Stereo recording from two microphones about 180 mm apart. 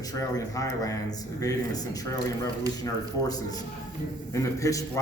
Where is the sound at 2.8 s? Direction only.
20° left (ahead or behind).